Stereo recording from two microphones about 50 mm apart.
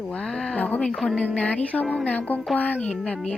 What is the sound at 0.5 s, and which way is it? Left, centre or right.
Speech, left.